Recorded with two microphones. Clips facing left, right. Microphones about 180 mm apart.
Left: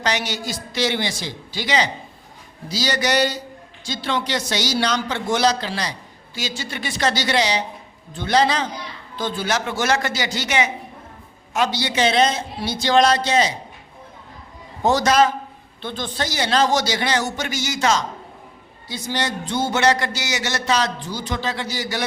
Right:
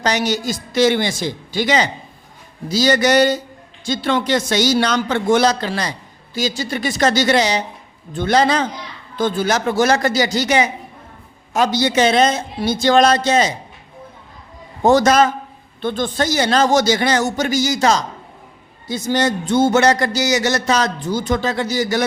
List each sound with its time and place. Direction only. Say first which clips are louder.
0.0 s speech: right 5 dB; 40° right (ahead or behind)
6.3 s speech: right 8 dB; 40° right (ahead or behind)
14.8 s speech: right 4 dB; 50° right (ahead or behind)